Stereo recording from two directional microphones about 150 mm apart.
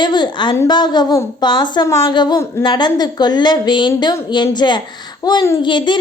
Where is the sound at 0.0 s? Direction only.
30° left (ahead or behind).